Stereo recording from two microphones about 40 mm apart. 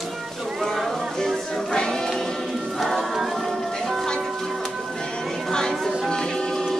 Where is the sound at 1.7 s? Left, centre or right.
Left.